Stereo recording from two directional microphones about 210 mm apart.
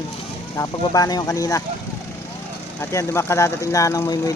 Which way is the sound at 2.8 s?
10° left (ahead or behind).